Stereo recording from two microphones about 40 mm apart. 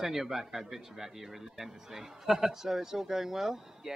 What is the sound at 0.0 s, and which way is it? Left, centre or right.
A man's voice, centre.